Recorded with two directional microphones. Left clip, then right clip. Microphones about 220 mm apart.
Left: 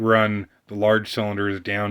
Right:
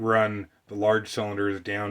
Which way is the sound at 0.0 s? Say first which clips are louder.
Left 4 dB; 35° left (ahead or behind).